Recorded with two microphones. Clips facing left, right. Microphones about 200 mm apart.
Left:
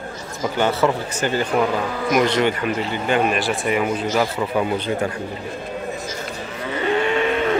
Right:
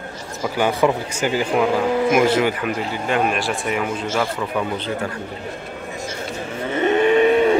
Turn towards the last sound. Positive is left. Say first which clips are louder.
# right 5 dB
turn(degrees=-15)  # may be behind; listen again after turning